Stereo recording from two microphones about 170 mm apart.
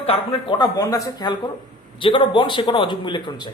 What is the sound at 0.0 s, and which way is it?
Speech, 35° left (ahead or behind).